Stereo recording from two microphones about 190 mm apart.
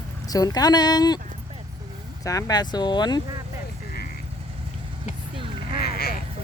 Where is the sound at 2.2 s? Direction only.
15° left (ahead or behind).